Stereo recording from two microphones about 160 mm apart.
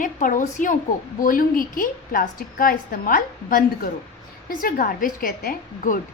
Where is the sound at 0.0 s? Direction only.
55° left (ahead or behind).